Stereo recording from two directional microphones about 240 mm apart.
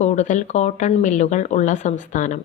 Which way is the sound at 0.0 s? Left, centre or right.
Left.